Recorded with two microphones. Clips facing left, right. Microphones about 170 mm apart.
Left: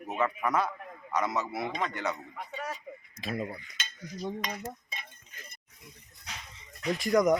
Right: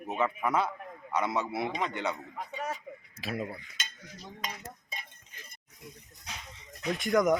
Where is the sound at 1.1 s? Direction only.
25° right (ahead or behind).